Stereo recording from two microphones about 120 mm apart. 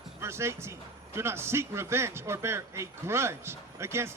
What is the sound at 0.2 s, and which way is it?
Speech, 20° right (ahead or behind).